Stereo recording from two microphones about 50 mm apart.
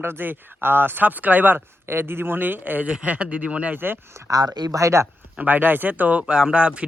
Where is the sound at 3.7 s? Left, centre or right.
Right.